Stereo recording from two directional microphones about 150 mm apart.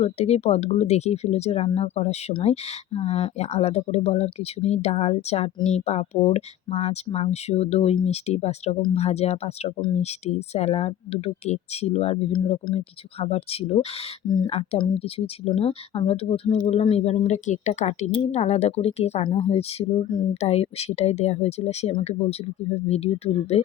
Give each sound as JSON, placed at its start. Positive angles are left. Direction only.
{"t": 0.0, "sound": "speech", "side_deg": 45}